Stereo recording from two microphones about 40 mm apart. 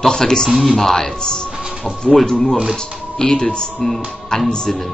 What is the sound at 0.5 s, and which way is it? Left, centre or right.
Speech, centre.